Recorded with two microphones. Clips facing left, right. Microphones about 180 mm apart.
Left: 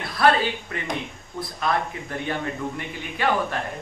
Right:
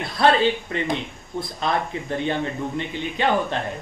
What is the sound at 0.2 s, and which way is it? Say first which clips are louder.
Speech: right 2 dB; 25° right (ahead or behind).